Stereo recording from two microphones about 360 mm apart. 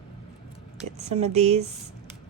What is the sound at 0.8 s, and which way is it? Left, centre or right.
Speech, centre.